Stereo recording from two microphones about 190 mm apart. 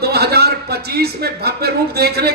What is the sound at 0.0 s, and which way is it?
A man's voice, 55° right (ahead or behind).